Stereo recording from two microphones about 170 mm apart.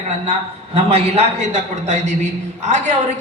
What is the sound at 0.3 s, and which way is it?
A man's voice, 40° right (ahead or behind).